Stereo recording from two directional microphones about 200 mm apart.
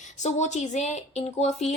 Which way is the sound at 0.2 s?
35° left (ahead or behind).